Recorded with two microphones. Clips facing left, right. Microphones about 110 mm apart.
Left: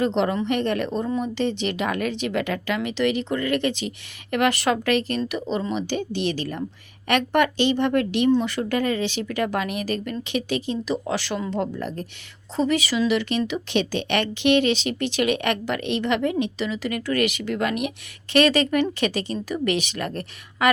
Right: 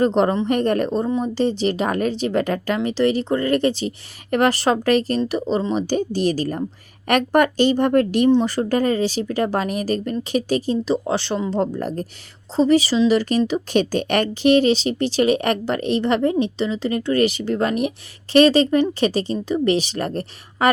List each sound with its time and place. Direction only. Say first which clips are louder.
0.0 s speech: right 4 dB; 40° right (ahead or behind)
11.6 s speech: right 5 dB; 40° right (ahead or behind)